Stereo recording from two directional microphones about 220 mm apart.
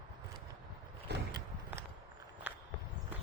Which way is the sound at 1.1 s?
50° right (ahead or behind).